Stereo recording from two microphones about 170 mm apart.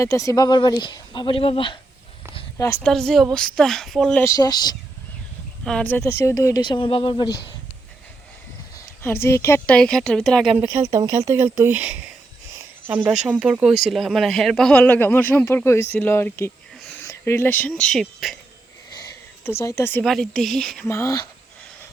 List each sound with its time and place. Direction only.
0.0 s speech: 20° left (ahead or behind)
3.1 s speech: centre (ahead or behind)
4.2 s speech: 20° left (ahead or behind)
5.6 s speech: 10° left (ahead or behind); by 7.3 s 30° left (ahead or behind)
9.0 s speech: 15° left (ahead or behind); by 10.7 s 5° right (ahead or behind)
10.7 s speech: 20° right (ahead or behind); by 18.3 s centre (ahead or behind)
19.5 s speech: 15° left (ahead or behind)
20.1 s speech: centre (ahead or behind)
20.8 s speech: 15° left (ahead or behind)